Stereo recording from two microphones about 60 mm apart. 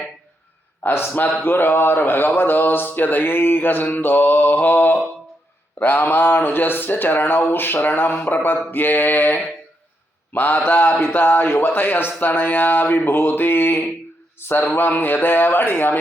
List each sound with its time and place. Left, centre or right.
0.8 s speech: left